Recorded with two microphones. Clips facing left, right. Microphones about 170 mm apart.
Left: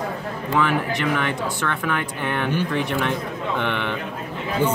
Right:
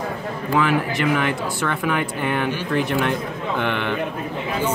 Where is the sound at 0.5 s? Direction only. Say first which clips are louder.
Right 1 dB; 5° right (ahead or behind).